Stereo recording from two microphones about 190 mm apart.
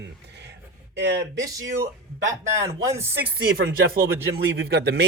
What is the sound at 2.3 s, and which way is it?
Speech, 15° right (ahead or behind).